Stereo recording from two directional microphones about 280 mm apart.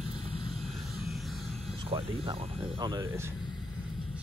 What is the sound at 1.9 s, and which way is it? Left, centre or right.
Speech, centre.